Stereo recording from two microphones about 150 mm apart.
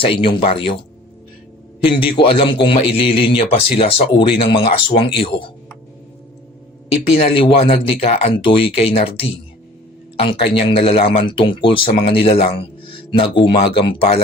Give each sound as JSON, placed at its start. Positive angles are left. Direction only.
{"t": 0.0, "sound": "a man's voice", "side_deg": 35}
{"t": 1.8, "sound": "a man's voice", "side_deg": 35}
{"t": 7.1, "sound": "a man's voice", "side_deg": 40}